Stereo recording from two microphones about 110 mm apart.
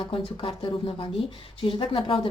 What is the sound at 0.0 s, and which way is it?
Speech, 50° left (ahead or behind).